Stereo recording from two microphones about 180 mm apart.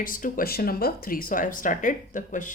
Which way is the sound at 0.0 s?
50° left (ahead or behind).